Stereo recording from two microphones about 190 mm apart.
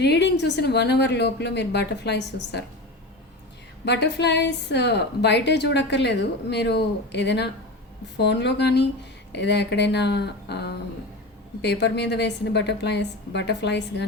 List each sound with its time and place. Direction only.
0.0 s a woman's voice: 65° left (ahead or behind)
3.8 s a woman's voice: 65° left (ahead or behind)